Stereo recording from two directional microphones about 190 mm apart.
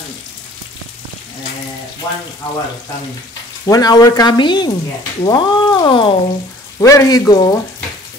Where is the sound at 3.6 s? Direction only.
20° left (ahead or behind).